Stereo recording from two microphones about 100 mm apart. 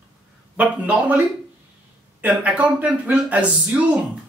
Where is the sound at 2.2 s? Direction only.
15° right (ahead or behind).